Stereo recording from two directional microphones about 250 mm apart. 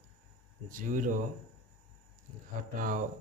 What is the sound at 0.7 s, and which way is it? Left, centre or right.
Speech, right.